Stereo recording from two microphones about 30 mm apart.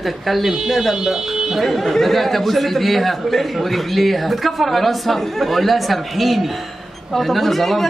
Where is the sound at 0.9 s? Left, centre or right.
Centre.